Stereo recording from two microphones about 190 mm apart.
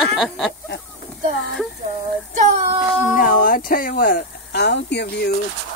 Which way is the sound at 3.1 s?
45° left (ahead or behind).